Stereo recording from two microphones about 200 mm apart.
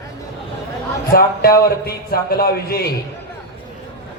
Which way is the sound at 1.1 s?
45° left (ahead or behind).